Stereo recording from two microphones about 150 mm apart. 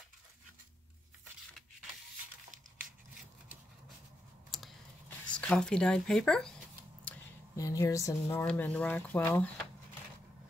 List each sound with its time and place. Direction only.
4.5 s a sound: centre (ahead or behind)
5.3 s speech: 5° left (ahead or behind)
7.5 s speech: 20° left (ahead or behind)